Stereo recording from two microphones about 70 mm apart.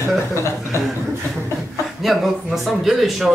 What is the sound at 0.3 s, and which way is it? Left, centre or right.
Speech, left.